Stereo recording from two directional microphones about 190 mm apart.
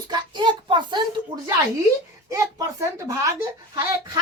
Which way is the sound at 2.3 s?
15° right (ahead or behind).